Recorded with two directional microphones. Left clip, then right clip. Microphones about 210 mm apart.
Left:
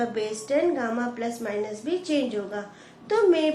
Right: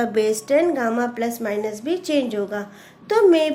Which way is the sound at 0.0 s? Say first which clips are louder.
Right 8 dB; 50° right (ahead or behind).